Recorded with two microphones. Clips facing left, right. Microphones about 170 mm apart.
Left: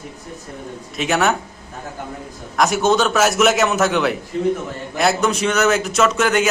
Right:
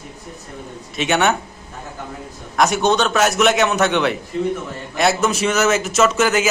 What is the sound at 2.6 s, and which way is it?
A man's voice, centre (ahead or behind).